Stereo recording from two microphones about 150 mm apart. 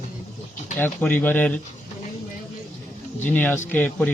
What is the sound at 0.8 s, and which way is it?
Speech, 10° left (ahead or behind).